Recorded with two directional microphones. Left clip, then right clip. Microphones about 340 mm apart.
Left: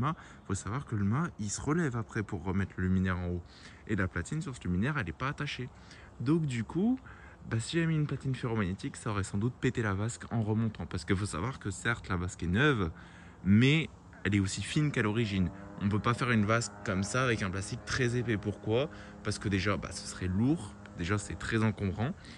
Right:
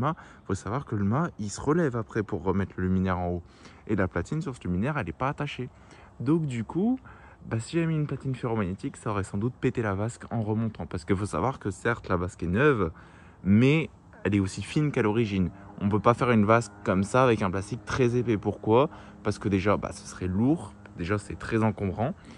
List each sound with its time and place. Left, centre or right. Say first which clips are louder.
0.0 s speech: right 5 dB; centre